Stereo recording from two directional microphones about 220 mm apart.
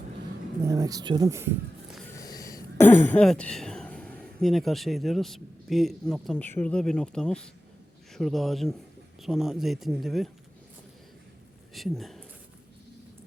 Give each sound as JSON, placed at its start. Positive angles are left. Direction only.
{"t": 0.6, "sound": "speech", "side_deg": -15}
{"t": 2.1, "sound": "speech", "side_deg": 15}
{"t": 11.7, "sound": "speech", "side_deg": 0}